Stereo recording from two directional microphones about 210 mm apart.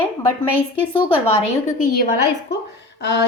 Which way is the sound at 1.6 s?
35° left (ahead or behind).